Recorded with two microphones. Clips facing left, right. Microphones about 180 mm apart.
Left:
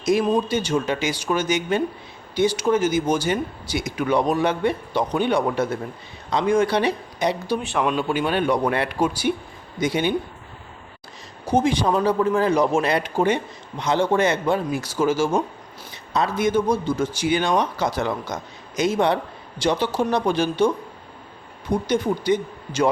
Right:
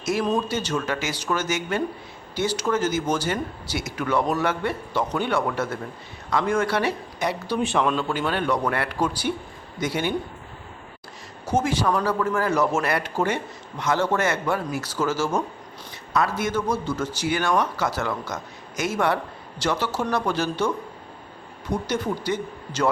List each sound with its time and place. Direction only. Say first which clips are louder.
0.0 s a man's voice: left 4 dB; 15° left (ahead or behind)
7.5 s speech: even; 5° left (ahead or behind)
7.9 s a man's voice: left 3 dB; 15° left (ahead or behind)
11.4 s a man's voice: left 3 dB; 15° left (ahead or behind)
16.4 s a man's voice: left 5 dB; 15° left (ahead or behind)